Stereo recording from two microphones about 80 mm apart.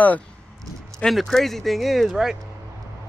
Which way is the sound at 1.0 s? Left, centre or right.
Centre.